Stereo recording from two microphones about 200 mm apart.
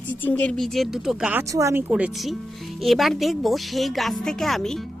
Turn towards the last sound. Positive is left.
turn(degrees=0)  # may be behind; listen again after turning